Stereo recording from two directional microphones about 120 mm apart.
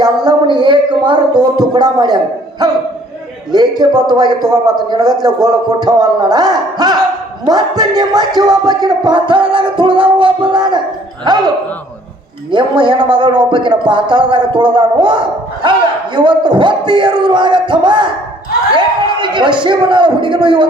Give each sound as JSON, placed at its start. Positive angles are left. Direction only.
{"t": 0.3, "sound": "a man's voice", "side_deg": -40}
{"t": 8.4, "sound": "music", "side_deg": -35}
{"t": 11.3, "sound": "a man's voice", "side_deg": -35}
{"t": 12.8, "sound": "a man's voice", "side_deg": -40}